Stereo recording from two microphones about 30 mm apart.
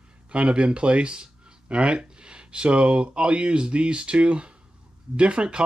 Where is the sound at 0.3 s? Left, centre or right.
Right.